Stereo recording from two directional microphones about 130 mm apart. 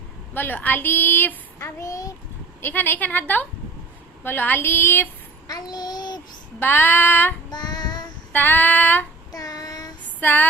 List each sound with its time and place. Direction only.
0.3 s speech: 15° left (ahead or behind)
2.6 s speech: 15° left (ahead or behind)
5.5 s child singing: 30° left (ahead or behind)
6.6 s speech: 15° left (ahead or behind)
7.5 s child singing: 30° left (ahead or behind)
8.3 s speech: 15° left (ahead or behind)
9.3 s child singing: 30° left (ahead or behind)
10.2 s a sound: 15° left (ahead or behind)